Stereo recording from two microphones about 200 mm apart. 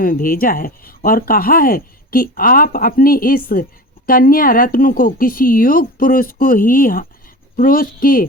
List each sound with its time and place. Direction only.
0.0 s speech: 45° left (ahead or behind)